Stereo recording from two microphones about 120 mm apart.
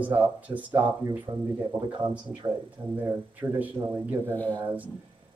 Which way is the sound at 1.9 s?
40° right (ahead or behind).